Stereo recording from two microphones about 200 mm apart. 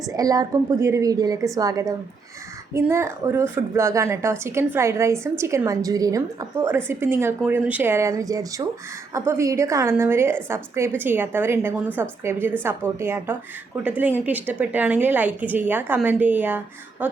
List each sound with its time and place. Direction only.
0.1 s a woman's voice: 20° right (ahead or behind)